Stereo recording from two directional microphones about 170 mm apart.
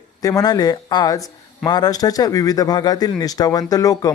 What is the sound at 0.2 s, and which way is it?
Speech, 20° left (ahead or behind).